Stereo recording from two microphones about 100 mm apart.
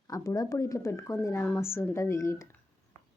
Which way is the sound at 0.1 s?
35° left (ahead or behind).